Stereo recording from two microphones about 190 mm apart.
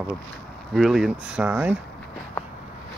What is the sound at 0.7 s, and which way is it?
Speech, centre (ahead or behind).